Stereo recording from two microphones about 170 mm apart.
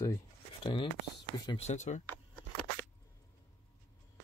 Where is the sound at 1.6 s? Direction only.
40° left (ahead or behind).